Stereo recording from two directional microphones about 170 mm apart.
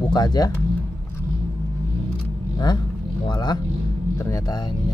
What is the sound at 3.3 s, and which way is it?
Speech, 25° left (ahead or behind).